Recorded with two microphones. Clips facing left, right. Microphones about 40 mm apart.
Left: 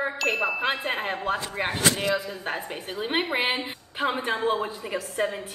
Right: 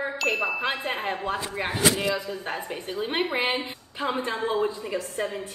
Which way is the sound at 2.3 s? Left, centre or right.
Centre.